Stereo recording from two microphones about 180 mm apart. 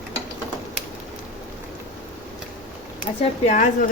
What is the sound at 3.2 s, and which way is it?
Speech, 40° left (ahead or behind).